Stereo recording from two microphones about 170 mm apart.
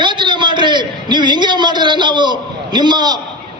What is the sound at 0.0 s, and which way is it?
A man's voice, 30° right (ahead or behind).